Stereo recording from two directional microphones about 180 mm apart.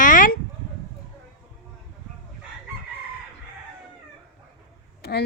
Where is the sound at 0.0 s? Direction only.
50° left (ahead or behind).